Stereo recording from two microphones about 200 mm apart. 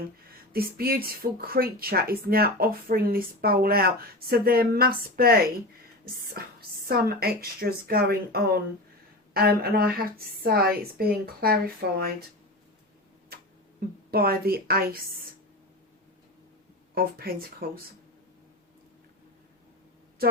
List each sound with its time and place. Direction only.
0.5 s speech: 50° right (ahead or behind)
13.3 s a sound: 50° right (ahead or behind)
16.9 s speech: 50° right (ahead or behind)